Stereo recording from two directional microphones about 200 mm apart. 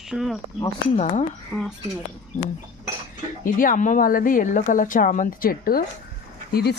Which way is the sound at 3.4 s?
45° left (ahead or behind).